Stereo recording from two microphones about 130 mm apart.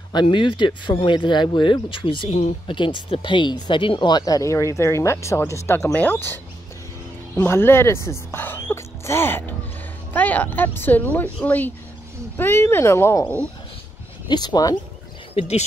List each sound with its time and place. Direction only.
0.1 s speech: 40° left (ahead or behind); by 13.5 s 15° left (ahead or behind)
14.2 s speech: 35° left (ahead or behind)
15.3 s speech: 55° left (ahead or behind)